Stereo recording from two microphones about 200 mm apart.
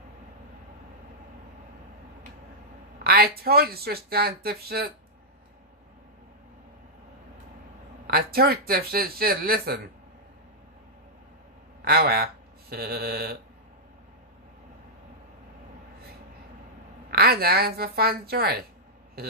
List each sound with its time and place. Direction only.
3.0 s speech: 50° right (ahead or behind)
8.1 s speech: 50° right (ahead or behind)
11.8 s speech: 50° right (ahead or behind)
17.1 s speech: 50° right (ahead or behind)